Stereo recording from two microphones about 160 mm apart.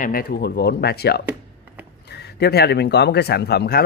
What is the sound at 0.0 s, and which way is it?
Speech, 65° left (ahead or behind).